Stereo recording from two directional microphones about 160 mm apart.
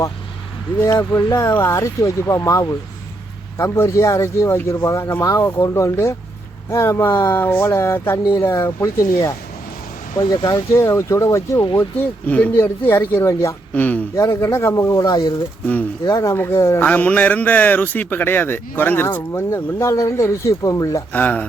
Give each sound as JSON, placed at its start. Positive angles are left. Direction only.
{"t": 0.9, "sound": "a man's voice", "side_deg": 25}